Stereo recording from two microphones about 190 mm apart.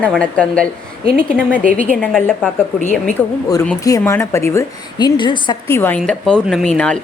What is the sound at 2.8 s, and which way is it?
Speech, 10° left (ahead or behind).